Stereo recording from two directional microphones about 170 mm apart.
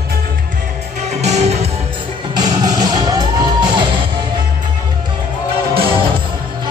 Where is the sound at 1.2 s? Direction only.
40° right (ahead or behind).